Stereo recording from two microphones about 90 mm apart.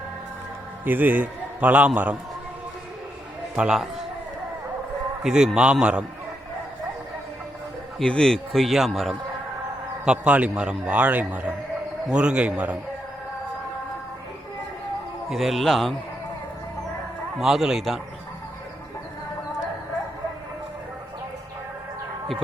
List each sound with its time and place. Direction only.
0.9 s a man's voice: 20° right (ahead or behind)
3.5 s a man's voice: 10° right (ahead or behind)
5.2 s a man's voice: 5° right (ahead or behind)
7.9 s a man's voice: 10° left (ahead or behind)
10.1 s a man's voice: 15° right (ahead or behind)
15.3 s a man's voice: centre (ahead or behind)
17.4 s a man's voice: 5° right (ahead or behind)